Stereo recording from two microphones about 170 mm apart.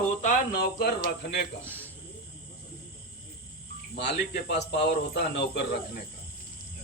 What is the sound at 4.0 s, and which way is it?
Speech, 90° left.